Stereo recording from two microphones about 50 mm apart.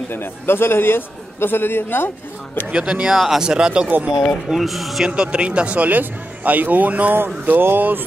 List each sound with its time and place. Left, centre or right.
0.1 s a man's voice: left
2.7 s speech: centre
4.5 s speech: centre
5.0 s a man's voice: centre
7.4 s speech: right